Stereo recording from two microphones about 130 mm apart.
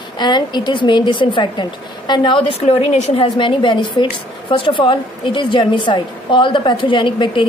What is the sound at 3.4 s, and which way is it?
A woman's voice, 40° left (ahead or behind).